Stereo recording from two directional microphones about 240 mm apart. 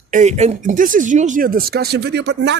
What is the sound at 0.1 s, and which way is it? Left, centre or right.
Speech, right.